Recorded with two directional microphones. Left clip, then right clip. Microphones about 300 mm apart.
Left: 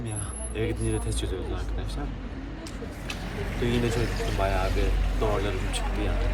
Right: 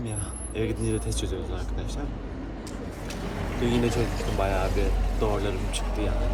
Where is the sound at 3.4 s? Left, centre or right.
Right.